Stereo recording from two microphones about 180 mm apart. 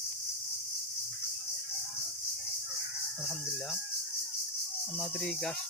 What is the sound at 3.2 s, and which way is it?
Speech, centre (ahead or behind).